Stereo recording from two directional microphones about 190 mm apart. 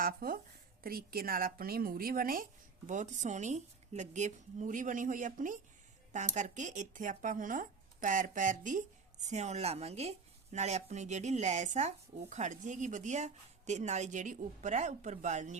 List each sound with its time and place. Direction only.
0.0 s speech: 50° right (ahead or behind)